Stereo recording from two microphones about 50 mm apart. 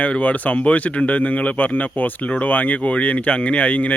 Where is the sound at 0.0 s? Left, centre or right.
Left.